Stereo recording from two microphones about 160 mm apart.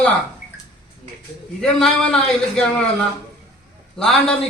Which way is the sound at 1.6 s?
5° left (ahead or behind).